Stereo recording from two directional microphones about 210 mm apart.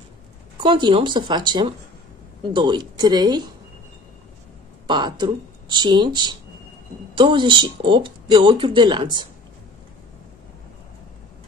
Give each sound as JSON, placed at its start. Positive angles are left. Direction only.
{"t": 0.6, "sound": "speech", "side_deg": -20}
{"t": 4.8, "sound": "speech", "side_deg": -20}